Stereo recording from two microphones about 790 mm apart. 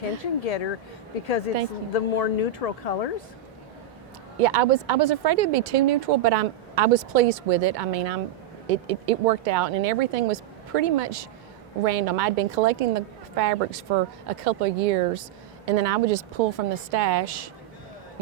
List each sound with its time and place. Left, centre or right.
0.4 s speech: left
1.9 s speech: left
4.4 s speech: right